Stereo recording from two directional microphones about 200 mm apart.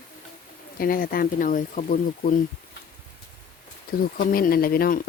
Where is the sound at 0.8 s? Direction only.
45° left (ahead or behind).